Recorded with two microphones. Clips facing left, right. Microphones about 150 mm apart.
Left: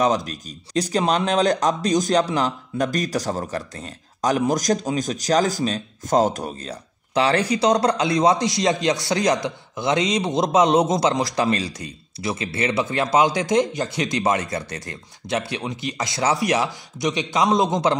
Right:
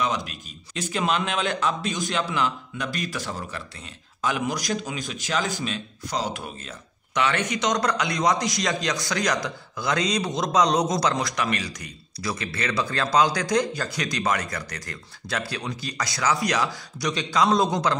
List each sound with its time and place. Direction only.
0.0 s speech: 40° left (ahead or behind); by 17.9 s 20° left (ahead or behind)